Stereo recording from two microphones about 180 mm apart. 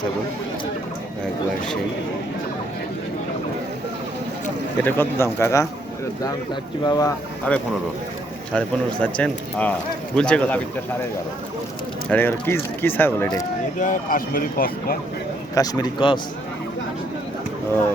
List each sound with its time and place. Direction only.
4.8 s speech: 10° left (ahead or behind)
7.5 s speech: 10° left (ahead or behind)
12.0 s speech: 10° left (ahead or behind)
13.7 s speech: 45° left (ahead or behind)
15.5 s speech: 20° left (ahead or behind)